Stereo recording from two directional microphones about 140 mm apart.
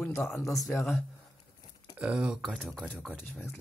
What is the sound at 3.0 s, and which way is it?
Speech, 5° left (ahead or behind).